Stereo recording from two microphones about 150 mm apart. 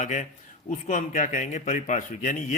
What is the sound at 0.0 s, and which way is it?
Speech, 55° left (ahead or behind).